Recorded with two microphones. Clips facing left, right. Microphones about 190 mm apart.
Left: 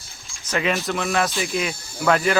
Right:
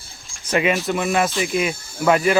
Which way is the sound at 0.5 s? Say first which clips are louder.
Right 4 dB; 10° right (ahead or behind).